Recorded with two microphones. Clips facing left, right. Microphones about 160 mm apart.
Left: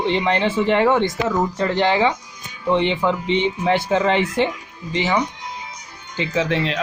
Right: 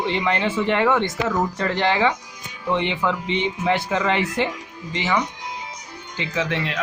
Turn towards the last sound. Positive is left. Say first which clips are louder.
# left 4 dB
turn(degrees=30)  # may be behind; listen again after turning